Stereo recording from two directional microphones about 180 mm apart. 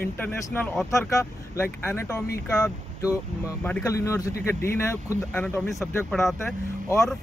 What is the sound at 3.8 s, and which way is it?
Speech, 15° left (ahead or behind).